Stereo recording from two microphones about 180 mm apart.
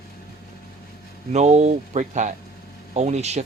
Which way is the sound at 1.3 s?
40° right (ahead or behind).